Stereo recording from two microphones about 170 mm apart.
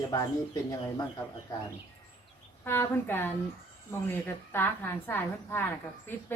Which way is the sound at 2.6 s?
15° left (ahead or behind).